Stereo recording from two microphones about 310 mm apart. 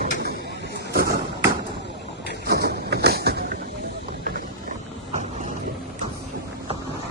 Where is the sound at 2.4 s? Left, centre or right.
Right.